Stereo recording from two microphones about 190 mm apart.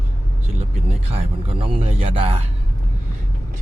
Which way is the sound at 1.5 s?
30° right (ahead or behind).